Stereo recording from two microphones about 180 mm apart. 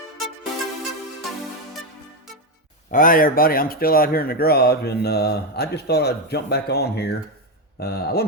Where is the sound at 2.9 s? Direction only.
50° left (ahead or behind).